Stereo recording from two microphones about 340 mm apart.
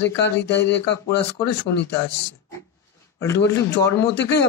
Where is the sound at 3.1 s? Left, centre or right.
Centre.